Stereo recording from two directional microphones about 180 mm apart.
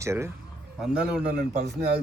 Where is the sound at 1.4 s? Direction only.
40° right (ahead or behind).